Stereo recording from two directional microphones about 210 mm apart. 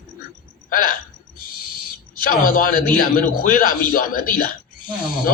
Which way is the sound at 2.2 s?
40° left (ahead or behind).